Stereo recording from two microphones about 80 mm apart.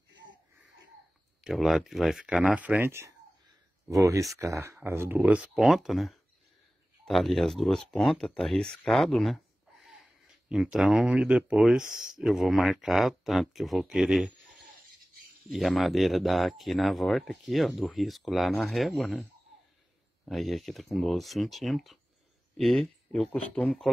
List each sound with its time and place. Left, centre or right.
1.4 s speech: centre
2.2 s speech: centre
3.9 s speech: right
5.2 s speech: centre
5.6 s speech: centre
15.5 s speech: centre
20.2 s speech: centre